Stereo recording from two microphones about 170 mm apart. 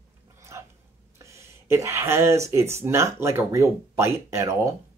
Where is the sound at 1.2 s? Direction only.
15° right (ahead or behind).